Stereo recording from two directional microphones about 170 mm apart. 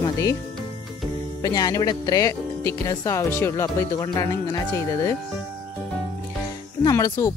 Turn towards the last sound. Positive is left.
turn(degrees=15)  # may be behind; listen again after turning